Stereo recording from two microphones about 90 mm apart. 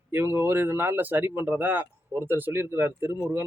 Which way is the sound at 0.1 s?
25° right (ahead or behind).